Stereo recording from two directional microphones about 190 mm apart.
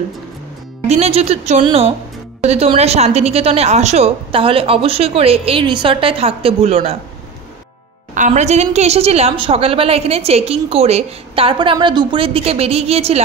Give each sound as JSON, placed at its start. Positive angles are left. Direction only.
{"t": 0.8, "sound": "a woman's voice", "side_deg": -35}
{"t": 8.1, "sound": "a woman's voice", "side_deg": -40}